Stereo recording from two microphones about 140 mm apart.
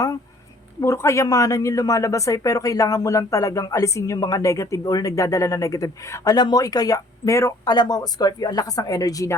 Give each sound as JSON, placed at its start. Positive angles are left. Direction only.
{"t": 0.8, "sound": "speech", "side_deg": 20}